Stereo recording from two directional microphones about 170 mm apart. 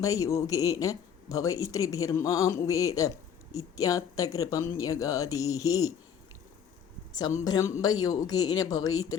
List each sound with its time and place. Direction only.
0.0 s speech: 20° left (ahead or behind)
7.2 s speech: 20° left (ahead or behind)